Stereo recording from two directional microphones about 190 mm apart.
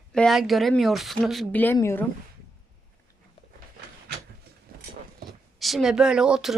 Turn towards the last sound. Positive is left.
turn(degrees=-5)  # may be behind; listen again after turning